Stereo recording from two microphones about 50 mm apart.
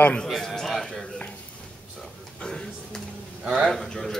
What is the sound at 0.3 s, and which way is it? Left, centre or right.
Speech, centre.